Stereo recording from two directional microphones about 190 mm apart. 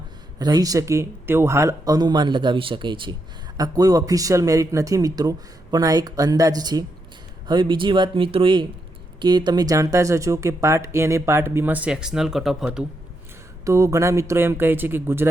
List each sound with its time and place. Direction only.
0.3 s speech: 20° right (ahead or behind); by 12.8 s centre (ahead or behind)
13.7 s speech: 15° right (ahead or behind)